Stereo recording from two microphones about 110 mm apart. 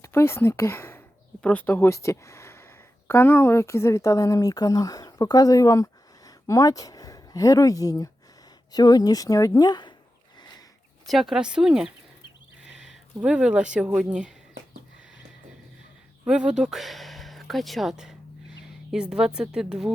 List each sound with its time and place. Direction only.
0.0 s a sound: 25° left (ahead or behind)
1.5 s speech: 15° left (ahead or behind); by 9.9 s 40° left (ahead or behind)
11.0 s a woman's voice: centre (ahead or behind)
16.2 s a woman's voice: 10° right (ahead or behind)